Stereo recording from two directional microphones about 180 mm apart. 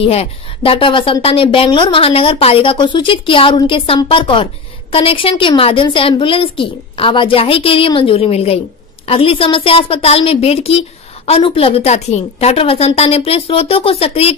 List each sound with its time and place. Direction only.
0.0 s a woman's voice: 30° left (ahead or behind)